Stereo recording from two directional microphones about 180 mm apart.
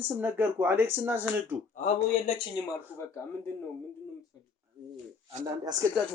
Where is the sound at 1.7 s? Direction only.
45° left (ahead or behind).